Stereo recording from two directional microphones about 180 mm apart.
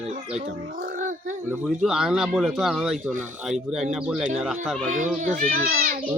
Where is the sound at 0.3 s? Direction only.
50° right (ahead or behind).